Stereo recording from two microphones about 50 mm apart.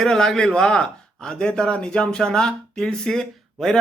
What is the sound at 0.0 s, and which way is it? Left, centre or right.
A man's voice, centre.